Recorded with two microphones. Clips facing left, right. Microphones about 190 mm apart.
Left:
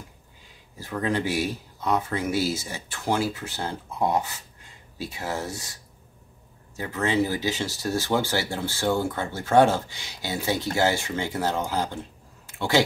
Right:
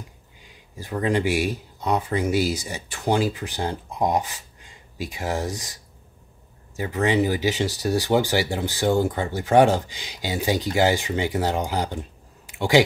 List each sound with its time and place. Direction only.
0.7 s speech: 15° right (ahead or behind)
6.8 s speech: 15° right (ahead or behind)